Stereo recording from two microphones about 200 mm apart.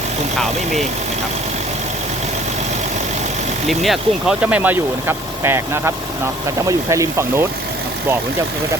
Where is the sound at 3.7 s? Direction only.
Centre (ahead or behind).